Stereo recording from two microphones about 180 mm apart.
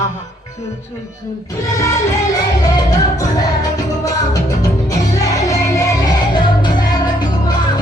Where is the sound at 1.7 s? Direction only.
15° left (ahead or behind).